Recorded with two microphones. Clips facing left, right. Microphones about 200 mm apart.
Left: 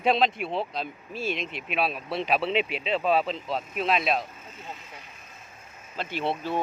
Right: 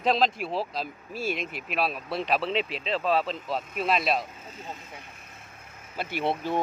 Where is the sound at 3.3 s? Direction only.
Centre (ahead or behind).